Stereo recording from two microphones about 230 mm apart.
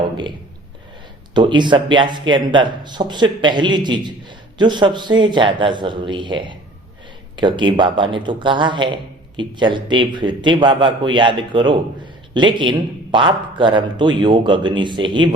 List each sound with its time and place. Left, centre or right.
1.3 s speech: centre